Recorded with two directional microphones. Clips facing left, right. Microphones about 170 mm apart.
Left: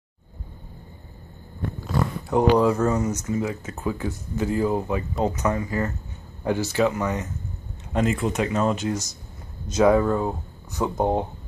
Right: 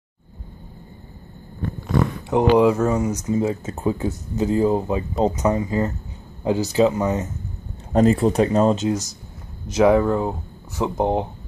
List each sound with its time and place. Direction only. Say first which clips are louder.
1.9 s a sound: right 4 dB; centre (ahead or behind)
2.5 s speech: right 3 dB; 10° right (ahead or behind)
3.3 s speech: right 5 dB; 30° right (ahead or behind)
7.9 s speech: right 7 dB; 35° right (ahead or behind)
9.8 s speech: right 2 dB; 10° right (ahead or behind)